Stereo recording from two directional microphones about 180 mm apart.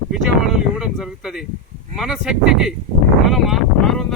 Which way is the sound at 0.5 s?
5° right (ahead or behind).